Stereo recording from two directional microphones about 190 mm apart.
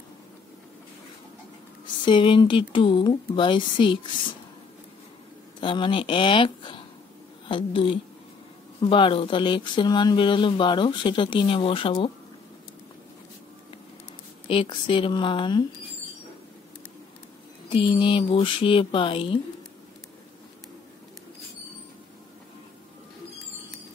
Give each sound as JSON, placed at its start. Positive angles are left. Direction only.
{"t": 2.0, "sound": "speech", "side_deg": 25}
{"t": 5.6, "sound": "speech", "side_deg": 25}
{"t": 14.5, "sound": "speech", "side_deg": 30}
{"t": 17.6, "sound": "speech", "side_deg": 25}